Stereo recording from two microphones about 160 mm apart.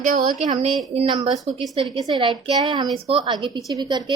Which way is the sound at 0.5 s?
30° right (ahead or behind).